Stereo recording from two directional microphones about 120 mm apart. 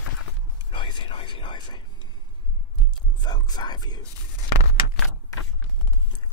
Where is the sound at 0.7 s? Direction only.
45° left (ahead or behind).